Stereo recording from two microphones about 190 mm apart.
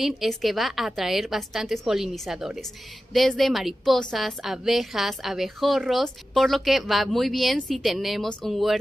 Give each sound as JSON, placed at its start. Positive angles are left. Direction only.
{"t": 0.0, "sound": "a woman's voice", "side_deg": 0}